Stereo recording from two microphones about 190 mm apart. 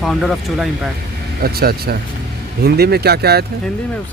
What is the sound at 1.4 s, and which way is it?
A man's voice, 55° right (ahead or behind).